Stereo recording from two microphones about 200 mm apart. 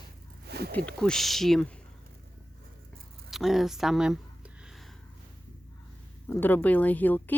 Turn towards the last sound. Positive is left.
turn(degrees=10)  # may be behind; listen again after turning